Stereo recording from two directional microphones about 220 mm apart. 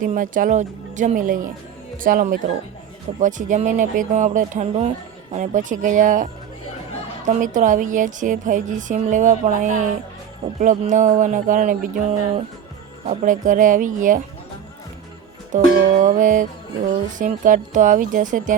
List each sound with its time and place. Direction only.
0.0 s a woman's voice: 35° right (ahead or behind)
7.3 s a woman's voice: 35° right (ahead or behind)
13.1 s a woman's voice: 35° right (ahead or behind)
15.5 s a woman's voice: 35° right (ahead or behind)